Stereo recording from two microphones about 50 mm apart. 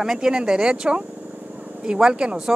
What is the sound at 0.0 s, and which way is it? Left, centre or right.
Speech, centre.